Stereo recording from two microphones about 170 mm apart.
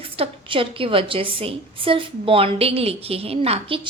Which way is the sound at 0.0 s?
30° right (ahead or behind).